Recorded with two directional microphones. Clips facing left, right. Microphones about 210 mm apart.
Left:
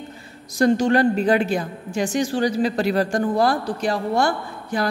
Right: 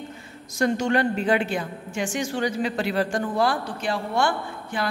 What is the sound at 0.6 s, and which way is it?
A woman's voice, 35° left (ahead or behind).